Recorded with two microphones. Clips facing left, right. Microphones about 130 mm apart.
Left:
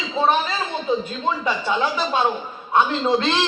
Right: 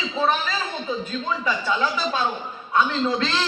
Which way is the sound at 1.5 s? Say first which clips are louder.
Even; 30° left (ahead or behind).